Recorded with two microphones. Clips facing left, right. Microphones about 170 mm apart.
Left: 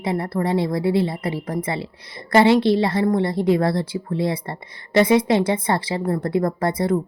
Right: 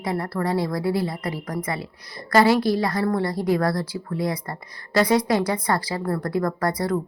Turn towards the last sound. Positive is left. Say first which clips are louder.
# left 3 dB
turn(degrees=25)  # may be behind; listen again after turning